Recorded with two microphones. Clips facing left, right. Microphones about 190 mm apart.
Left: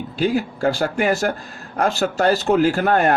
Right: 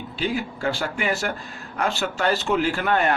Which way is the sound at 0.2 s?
40° left (ahead or behind).